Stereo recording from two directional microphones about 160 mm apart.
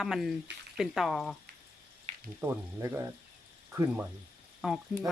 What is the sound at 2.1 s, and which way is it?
Frying, 45° right (ahead or behind).